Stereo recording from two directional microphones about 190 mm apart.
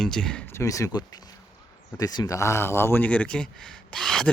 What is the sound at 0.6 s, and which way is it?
A man's voice, 15° left (ahead or behind).